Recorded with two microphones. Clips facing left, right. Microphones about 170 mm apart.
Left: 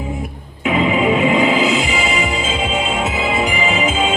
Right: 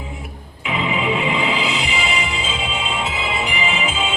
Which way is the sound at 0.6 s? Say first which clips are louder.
Left 7 dB; 45° left (ahead or behind).